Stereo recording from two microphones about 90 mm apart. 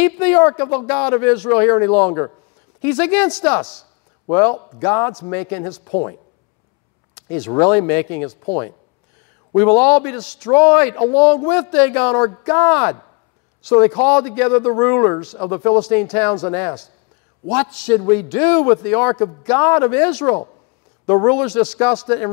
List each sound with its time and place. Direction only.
0.0 s a man's voice: 15° left (ahead or behind)
7.2 s a man's voice: 15° left (ahead or behind)